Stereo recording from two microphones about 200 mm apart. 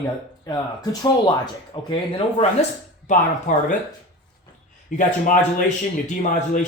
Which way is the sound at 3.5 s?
40° left (ahead or behind).